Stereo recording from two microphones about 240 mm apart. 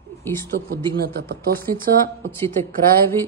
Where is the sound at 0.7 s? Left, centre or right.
Right.